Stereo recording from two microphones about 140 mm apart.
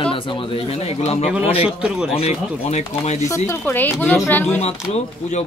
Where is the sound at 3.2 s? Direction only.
20° left (ahead or behind).